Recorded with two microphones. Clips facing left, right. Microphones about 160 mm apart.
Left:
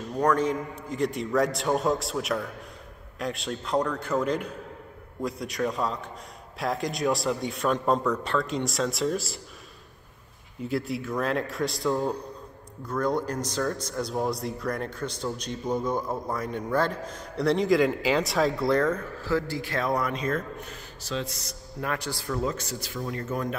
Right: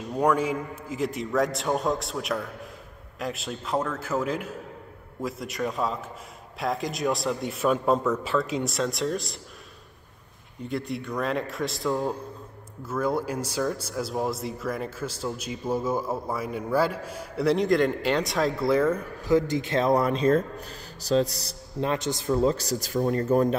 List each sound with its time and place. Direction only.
0.1 s speech: 10° right (ahead or behind)
10.6 s a man's voice: centre (ahead or behind); by 21.5 s 35° right (ahead or behind)
21.8 s speech: 20° right (ahead or behind); by 23.5 s 40° right (ahead or behind)